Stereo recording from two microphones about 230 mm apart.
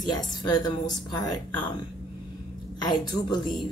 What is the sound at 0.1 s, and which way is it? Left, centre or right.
Speech, centre.